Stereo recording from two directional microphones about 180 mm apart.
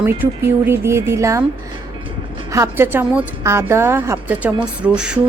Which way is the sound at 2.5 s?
15° right (ahead or behind).